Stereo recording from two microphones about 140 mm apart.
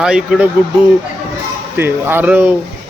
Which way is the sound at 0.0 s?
5° right (ahead or behind).